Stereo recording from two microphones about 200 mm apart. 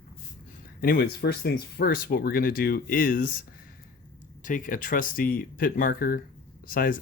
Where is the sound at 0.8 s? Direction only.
50° left (ahead or behind).